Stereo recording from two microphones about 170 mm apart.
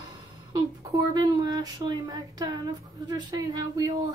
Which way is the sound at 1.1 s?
20° right (ahead or behind).